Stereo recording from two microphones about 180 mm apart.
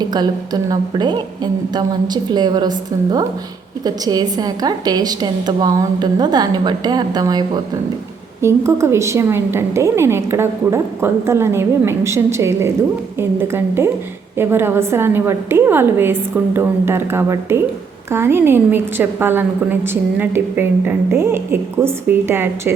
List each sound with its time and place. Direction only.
0.0 s a woman's voice: 20° right (ahead or behind)